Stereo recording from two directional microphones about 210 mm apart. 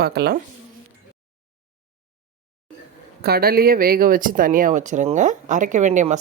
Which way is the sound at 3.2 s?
45° right (ahead or behind).